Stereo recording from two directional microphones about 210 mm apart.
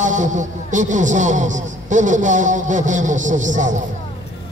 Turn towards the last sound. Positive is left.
turn(degrees=-35)  # may be behind; listen again after turning